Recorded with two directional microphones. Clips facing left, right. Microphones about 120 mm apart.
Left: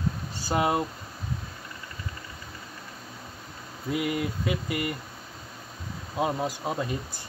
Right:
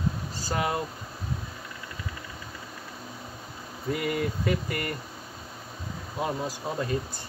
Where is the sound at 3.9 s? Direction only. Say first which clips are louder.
Even; 5° left (ahead or behind).